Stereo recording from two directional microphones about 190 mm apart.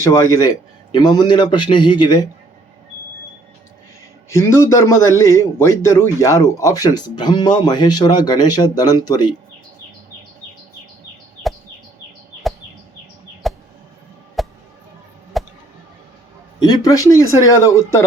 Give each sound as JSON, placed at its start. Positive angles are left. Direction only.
{"t": 0.0, "sound": "a man's voice", "side_deg": 15}
{"t": 4.3, "sound": "a man's voice", "side_deg": 15}
{"t": 13.4, "sound": "a sound", "side_deg": 0}
{"t": 16.6, "sound": "a man's voice", "side_deg": 20}